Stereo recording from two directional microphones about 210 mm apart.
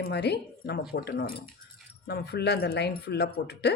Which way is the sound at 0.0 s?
50° left (ahead or behind).